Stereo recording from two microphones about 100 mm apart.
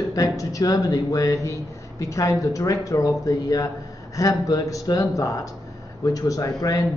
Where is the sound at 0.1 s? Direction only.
35° left (ahead or behind).